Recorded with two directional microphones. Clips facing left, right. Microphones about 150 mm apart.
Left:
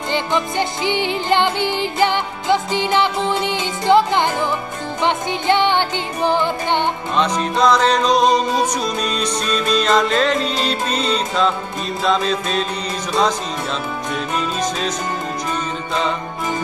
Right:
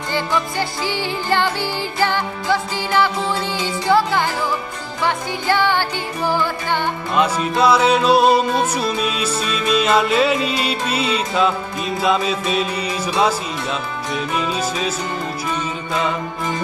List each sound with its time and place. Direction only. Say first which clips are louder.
0.1 s music: left 1 dB; 20° left (ahead or behind)
7.2 s music: right 1 dB; 5° right (ahead or behind)
14.1 s music: right 2 dB; 5° right (ahead or behind)